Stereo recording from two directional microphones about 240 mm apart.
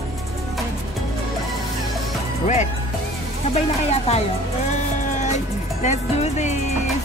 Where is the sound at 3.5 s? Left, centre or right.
Left.